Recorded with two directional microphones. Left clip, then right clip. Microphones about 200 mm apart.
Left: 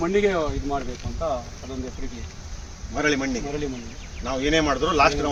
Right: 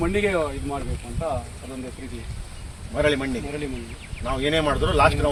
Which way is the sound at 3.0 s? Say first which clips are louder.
Right 1 dB; 40° right (ahead or behind).